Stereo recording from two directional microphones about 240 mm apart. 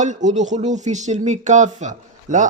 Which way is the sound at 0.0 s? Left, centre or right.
Right.